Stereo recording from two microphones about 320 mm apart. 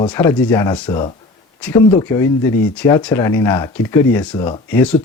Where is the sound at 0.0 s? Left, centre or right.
Centre.